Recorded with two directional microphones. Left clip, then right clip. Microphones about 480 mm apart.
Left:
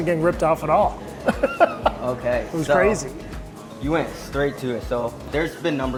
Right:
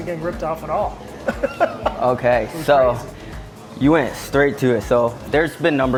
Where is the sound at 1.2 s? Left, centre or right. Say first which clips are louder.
Left 1 dB; left.